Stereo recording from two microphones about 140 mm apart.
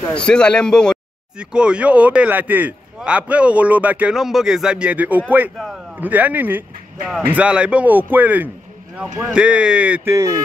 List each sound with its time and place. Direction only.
0.1 s speech: 5° left (ahead or behind)
1.4 s speech: 5° right (ahead or behind)
10.1 s speech: 25° right (ahead or behind)